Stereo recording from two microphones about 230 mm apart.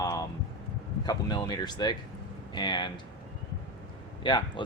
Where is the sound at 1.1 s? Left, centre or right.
Centre.